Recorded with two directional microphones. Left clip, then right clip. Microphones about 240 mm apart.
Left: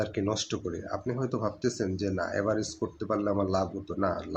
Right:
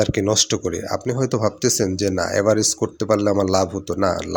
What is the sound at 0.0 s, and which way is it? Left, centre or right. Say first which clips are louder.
Speech: right 12 dB; right.